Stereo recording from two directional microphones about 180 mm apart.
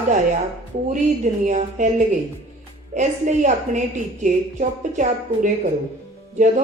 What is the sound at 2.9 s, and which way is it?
A woman's voice, 40° right (ahead or behind).